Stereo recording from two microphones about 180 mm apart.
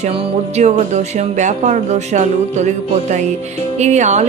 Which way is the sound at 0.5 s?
40° right (ahead or behind).